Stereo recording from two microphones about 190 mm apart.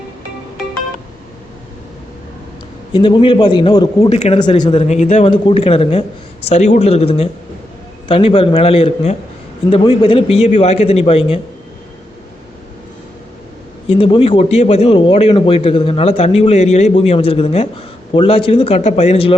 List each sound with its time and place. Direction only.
2.9 s a man's voice: 25° left (ahead or behind)
4.1 s a man's voice: 30° left (ahead or behind)
13.8 s a man's voice: 25° left (ahead or behind)